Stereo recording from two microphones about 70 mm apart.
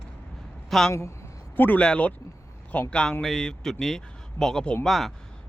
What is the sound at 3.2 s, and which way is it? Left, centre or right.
Speech, centre.